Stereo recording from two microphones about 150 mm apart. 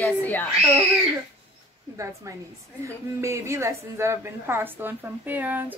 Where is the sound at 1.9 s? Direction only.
20° right (ahead or behind).